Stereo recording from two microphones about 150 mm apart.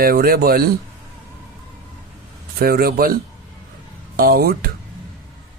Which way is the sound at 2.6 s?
85° right.